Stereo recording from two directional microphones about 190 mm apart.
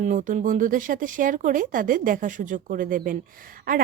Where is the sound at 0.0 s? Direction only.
45° right (ahead or behind).